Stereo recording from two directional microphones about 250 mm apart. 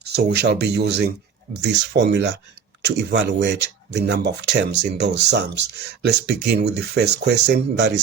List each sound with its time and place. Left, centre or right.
0.0 s speech: right